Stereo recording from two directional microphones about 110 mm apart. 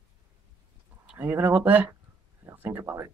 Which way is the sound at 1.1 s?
20° right (ahead or behind).